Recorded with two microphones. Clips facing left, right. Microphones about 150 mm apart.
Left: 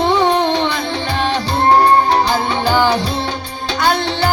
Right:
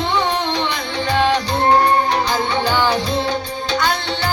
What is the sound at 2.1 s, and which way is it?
Music, 35° left (ahead or behind).